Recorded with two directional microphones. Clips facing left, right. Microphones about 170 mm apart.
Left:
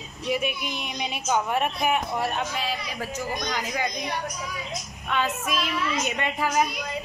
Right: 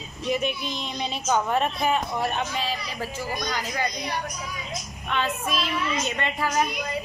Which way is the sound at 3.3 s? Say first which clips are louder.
Left 1 dB; 15° left (ahead or behind).